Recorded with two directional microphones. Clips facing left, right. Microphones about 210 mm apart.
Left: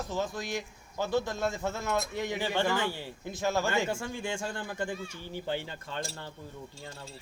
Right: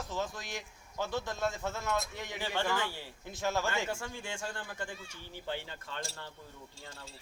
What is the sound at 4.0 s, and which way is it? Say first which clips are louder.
Speech: left 6 dB; 20° left (ahead or behind).